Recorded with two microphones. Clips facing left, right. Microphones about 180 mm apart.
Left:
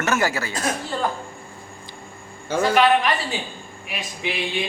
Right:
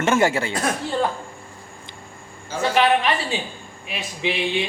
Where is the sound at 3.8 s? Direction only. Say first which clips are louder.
Right 3 dB; 25° right (ahead or behind).